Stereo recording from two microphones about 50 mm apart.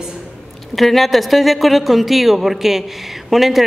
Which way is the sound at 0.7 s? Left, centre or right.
Centre.